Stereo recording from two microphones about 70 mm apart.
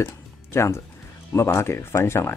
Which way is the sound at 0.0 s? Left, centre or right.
Left.